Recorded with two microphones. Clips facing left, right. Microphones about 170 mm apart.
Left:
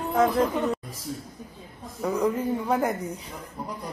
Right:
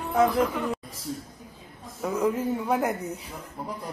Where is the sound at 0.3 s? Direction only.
25° left (ahead or behind).